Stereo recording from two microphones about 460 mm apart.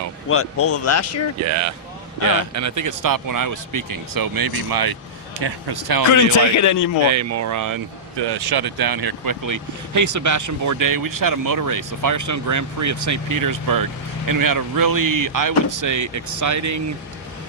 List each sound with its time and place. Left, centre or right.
0.3 s speech: left
1.4 s speech: right
6.6 s speech: left
7.1 s speech: right
8.2 s speech: right